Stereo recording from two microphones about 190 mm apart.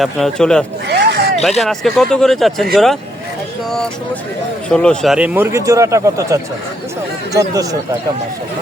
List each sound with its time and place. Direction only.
0.0 s speech: centre (ahead or behind)
0.9 s a sound: 60° right (ahead or behind)
1.6 s speech: centre (ahead or behind)
4.7 s speech: 5° left (ahead or behind); by 7.8 s 20° right (ahead or behind)